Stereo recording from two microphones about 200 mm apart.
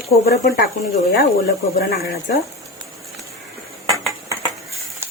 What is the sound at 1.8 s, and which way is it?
Speech, 55° left (ahead or behind).